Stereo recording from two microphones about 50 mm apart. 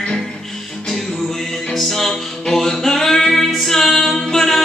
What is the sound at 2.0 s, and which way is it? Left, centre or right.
Singing, centre.